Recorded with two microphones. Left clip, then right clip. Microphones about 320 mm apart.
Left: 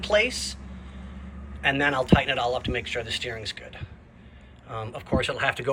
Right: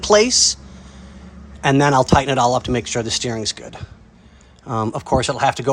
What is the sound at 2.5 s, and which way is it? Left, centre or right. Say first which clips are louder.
Speech: right 8 dB; right.